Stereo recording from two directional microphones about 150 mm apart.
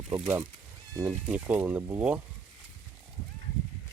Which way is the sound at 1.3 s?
10° right (ahead or behind).